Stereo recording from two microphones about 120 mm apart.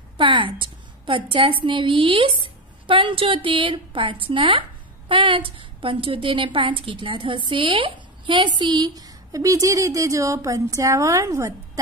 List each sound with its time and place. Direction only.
0.2 s a woman's voice: 45° right (ahead or behind); by 11.8 s 25° right (ahead or behind)